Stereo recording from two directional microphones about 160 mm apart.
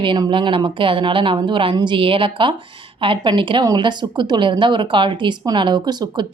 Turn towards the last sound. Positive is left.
turn(degrees=-25)  # may be behind; listen again after turning